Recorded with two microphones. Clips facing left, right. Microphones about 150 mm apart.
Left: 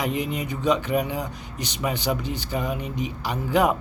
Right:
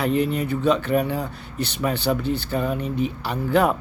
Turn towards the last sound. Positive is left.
turn(degrees=15)  # may be behind; listen again after turning